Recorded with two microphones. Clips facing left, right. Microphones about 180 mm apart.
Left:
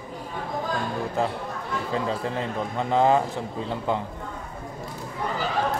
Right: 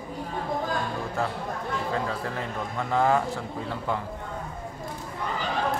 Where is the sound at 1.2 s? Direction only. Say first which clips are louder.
Left 1 dB; 20° left (ahead or behind).